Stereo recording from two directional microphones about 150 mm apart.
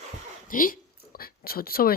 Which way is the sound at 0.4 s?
70° left (ahead or behind).